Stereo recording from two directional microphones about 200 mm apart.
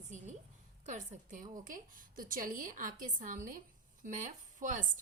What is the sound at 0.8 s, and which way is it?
A woman's voice, 40° right (ahead or behind).